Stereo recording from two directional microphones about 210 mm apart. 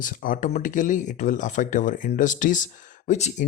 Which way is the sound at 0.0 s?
40° left (ahead or behind).